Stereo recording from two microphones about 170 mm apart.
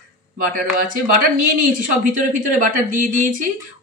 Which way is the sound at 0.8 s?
55° right (ahead or behind).